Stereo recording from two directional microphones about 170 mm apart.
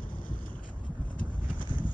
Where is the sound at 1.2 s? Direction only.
55° left (ahead or behind).